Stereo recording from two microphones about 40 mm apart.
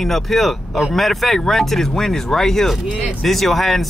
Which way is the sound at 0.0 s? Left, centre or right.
Centre.